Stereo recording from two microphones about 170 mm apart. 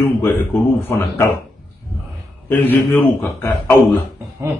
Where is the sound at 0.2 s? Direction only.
10° left (ahead or behind).